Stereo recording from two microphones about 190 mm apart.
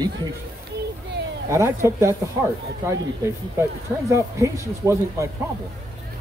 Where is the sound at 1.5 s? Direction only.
15° right (ahead or behind).